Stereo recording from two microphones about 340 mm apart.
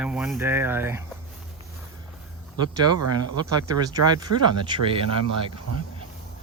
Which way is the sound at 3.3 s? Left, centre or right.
Centre.